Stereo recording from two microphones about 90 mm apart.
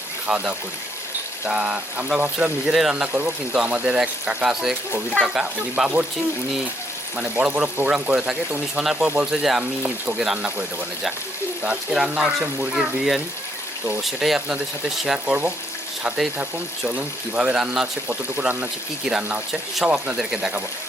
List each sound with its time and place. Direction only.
0.3 s speech: 15° right (ahead or behind)
7.2 s speech: 15° right (ahead or behind)
16.4 s speech: 15° right (ahead or behind)